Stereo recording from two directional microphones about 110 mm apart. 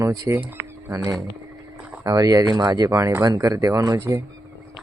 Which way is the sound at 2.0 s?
35° right (ahead or behind).